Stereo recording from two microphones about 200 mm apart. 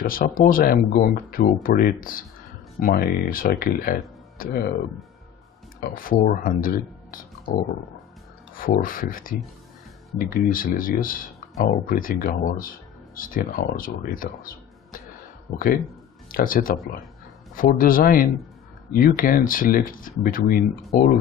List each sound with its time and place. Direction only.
0.0 s speech: 45° left (ahead or behind)
5.8 s speech: 45° left (ahead or behind)
8.5 s speech: 45° left (ahead or behind)